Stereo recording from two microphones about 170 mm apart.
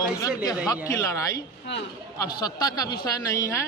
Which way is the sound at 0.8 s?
20° left (ahead or behind).